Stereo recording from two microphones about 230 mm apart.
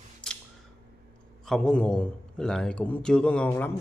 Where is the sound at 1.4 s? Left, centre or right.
Centre.